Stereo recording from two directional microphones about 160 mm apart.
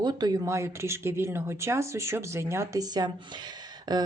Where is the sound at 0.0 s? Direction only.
25° right (ahead or behind).